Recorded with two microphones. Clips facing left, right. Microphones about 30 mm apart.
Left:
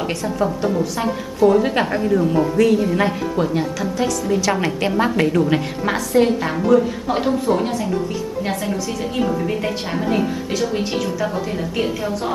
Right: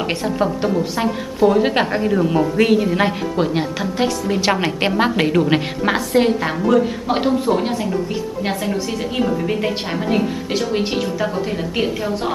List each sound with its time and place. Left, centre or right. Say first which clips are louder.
0.1 s a woman's voice: right 1 dB; right
2.9 s a woman's voice: right 1 dB; right
3.3 s a woman's voice: right 1 dB; right
9.5 s a woman's voice: right 2 dB; centre
10.7 s a woman's voice: right 2 dB; right